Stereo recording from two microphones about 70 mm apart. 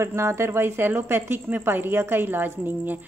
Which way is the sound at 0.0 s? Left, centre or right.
Right.